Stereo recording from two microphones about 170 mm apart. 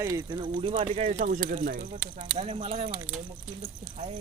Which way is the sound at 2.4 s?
35° right (ahead or behind).